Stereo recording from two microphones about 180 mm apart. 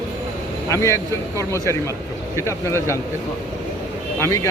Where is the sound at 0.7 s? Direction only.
15° left (ahead or behind).